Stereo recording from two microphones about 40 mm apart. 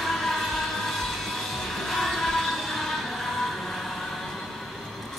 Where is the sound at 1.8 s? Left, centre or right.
Centre.